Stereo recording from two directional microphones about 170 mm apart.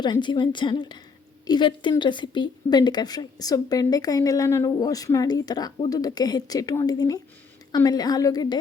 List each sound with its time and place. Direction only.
0.0 s speech: 25° left (ahead or behind)